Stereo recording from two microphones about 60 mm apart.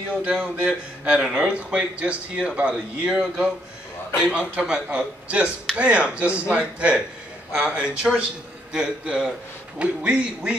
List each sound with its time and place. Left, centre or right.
0.2 s a man's voice: centre